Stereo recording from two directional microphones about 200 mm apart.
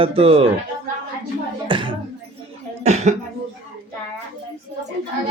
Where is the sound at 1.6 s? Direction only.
25° right (ahead or behind).